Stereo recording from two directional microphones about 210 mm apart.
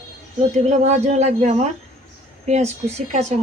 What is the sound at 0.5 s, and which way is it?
A woman's voice, 35° right (ahead or behind).